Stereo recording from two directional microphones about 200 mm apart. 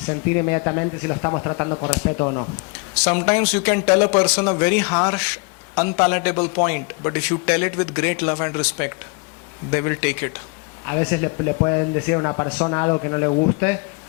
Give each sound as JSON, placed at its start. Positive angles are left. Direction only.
{"t": 0.1, "sound": "speech", "side_deg": 15}
{"t": 3.1, "sound": "speech", "side_deg": 15}